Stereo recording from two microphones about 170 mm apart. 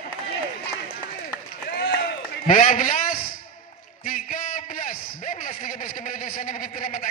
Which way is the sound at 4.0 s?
55° left (ahead or behind).